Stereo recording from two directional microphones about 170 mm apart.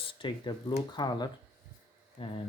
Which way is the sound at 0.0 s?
30° left (ahead or behind).